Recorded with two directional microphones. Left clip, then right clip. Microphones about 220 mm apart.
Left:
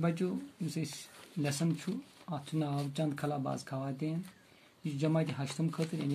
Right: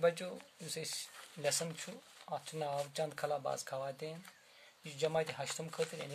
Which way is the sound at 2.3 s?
50° right (ahead or behind).